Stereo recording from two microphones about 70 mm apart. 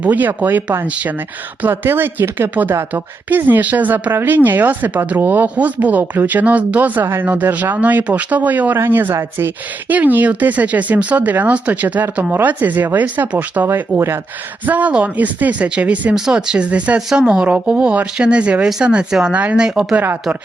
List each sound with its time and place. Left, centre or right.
0.0 s speech: right
7.0 s speech: right
7.3 s speech: right